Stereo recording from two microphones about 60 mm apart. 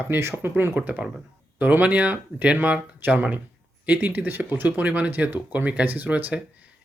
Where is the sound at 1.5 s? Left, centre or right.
Right.